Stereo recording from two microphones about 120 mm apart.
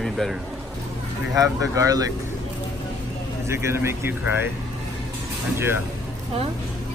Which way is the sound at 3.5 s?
20° right (ahead or behind).